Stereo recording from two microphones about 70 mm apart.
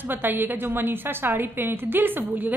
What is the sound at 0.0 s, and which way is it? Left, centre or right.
A woman's voice, right.